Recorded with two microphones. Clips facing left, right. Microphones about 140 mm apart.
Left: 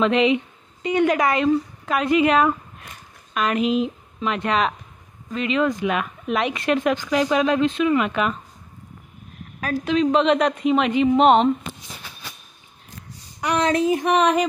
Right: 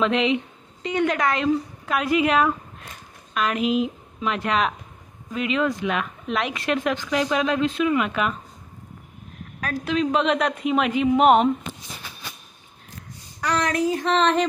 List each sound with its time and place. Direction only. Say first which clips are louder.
0.0 s a woman's voice: left 3 dB; centre (ahead or behind)
9.6 s speech: left 3 dB; centre (ahead or behind)
13.4 s a sound: left 3 dB; 20° left (ahead or behind)